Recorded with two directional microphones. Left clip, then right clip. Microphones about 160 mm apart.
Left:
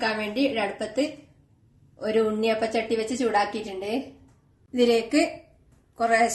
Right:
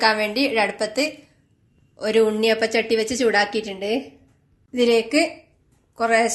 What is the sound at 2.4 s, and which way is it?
A woman's voice, 35° right (ahead or behind).